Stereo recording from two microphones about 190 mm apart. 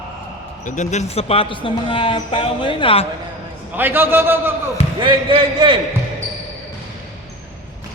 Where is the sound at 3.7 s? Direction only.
10° right (ahead or behind).